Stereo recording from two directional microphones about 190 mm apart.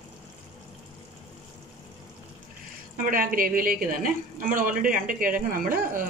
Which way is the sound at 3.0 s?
45° right (ahead or behind).